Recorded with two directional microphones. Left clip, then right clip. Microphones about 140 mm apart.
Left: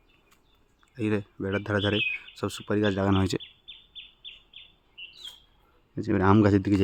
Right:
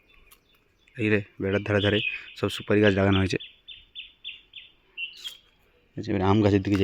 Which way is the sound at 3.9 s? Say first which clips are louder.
Right 4 dB; 40° left (ahead or behind).